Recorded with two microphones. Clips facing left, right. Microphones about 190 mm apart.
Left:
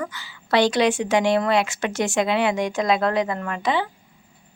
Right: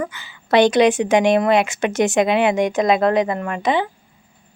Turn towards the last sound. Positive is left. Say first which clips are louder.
# right 4 dB
turn(degrees=-20)  # may be behind; listen again after turning